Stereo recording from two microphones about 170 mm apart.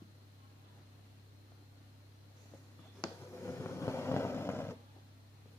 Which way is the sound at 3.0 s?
15° left (ahead or behind).